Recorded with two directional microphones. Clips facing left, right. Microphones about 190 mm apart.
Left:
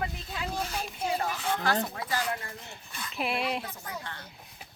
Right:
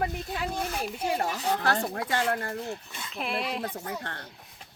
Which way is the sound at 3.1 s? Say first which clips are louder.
Left 1 dB; centre (ahead or behind).